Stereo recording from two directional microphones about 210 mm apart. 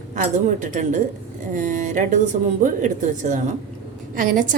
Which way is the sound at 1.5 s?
40° right (ahead or behind).